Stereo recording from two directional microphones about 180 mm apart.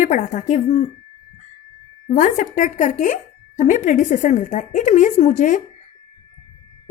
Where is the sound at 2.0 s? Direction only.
45° left (ahead or behind).